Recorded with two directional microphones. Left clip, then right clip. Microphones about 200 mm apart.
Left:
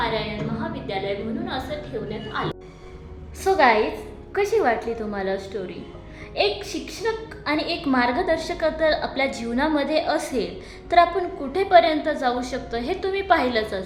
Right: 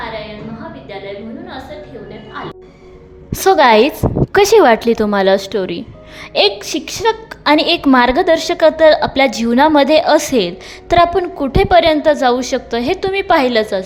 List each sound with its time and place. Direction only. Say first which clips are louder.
3.3 s a woman's voice: right 9 dB; 55° right (ahead or behind); by 13.8 s 40° right (ahead or behind)